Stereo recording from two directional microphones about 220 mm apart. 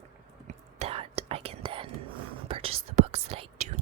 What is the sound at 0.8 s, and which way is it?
Whispering, 25° right (ahead or behind).